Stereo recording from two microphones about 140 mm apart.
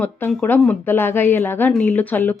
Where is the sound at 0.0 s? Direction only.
15° left (ahead or behind).